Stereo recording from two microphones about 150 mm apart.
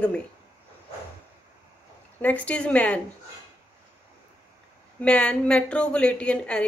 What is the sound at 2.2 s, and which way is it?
Speech, 10° left (ahead or behind).